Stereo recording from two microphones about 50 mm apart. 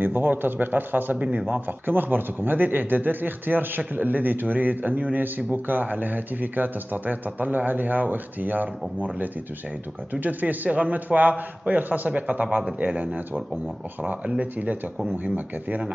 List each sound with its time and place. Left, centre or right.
0.0 s speech: right
1.1 s speech: right
1.5 s speech: right
14.4 s speech: right